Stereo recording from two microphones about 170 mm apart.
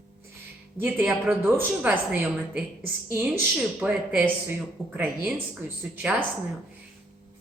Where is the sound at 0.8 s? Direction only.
10° right (ahead or behind).